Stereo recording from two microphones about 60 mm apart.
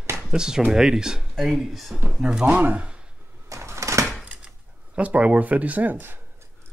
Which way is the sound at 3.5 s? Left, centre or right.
Right.